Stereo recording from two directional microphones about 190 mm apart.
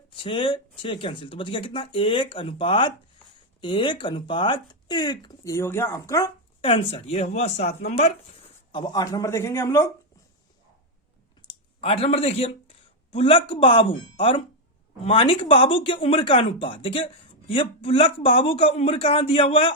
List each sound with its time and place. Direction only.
0.2 s speech: 25° left (ahead or behind)
6.6 s speech: 25° left (ahead or behind)
8.7 s speech: 20° left (ahead or behind)
11.4 s speech: 30° left (ahead or behind)